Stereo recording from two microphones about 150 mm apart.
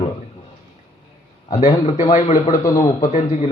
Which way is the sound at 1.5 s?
50° left (ahead or behind).